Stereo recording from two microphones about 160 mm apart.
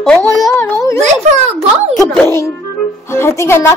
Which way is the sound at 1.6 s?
40° right (ahead or behind).